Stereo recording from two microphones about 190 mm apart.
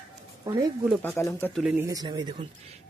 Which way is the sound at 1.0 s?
10° left (ahead or behind).